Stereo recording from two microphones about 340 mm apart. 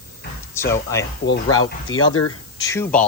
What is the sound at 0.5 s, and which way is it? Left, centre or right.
Speech, centre.